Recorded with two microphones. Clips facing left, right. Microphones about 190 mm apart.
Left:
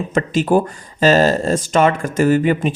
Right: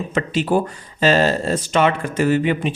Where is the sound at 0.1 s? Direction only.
45° left (ahead or behind).